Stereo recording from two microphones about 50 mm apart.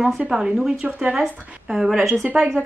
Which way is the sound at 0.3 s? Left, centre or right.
Centre.